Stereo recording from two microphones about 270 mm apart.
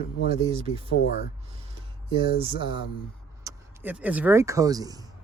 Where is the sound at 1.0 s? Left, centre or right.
Left.